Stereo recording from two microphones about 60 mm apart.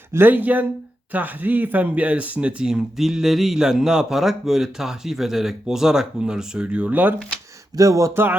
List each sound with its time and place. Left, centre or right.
0.1 s speech: right
7.8 s speech: right
8.1 s speech: right